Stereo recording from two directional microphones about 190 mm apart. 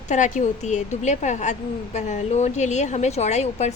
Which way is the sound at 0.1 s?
40° left (ahead or behind).